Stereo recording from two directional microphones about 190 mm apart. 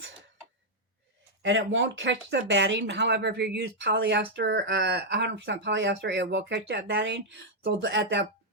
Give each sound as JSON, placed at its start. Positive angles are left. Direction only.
{"t": 1.4, "sound": "speech", "side_deg": -75}